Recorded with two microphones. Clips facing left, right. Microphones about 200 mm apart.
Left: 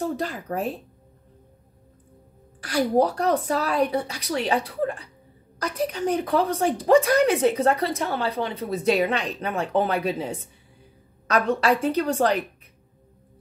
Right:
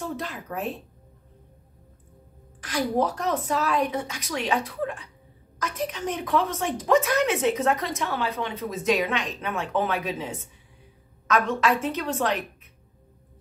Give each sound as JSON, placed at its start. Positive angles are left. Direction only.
{"t": 0.0, "sound": "a woman's voice", "side_deg": 35}
{"t": 2.6, "sound": "a woman's voice", "side_deg": 40}